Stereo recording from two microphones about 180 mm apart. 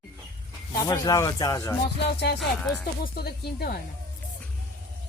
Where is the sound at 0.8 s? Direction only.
20° left (ahead or behind).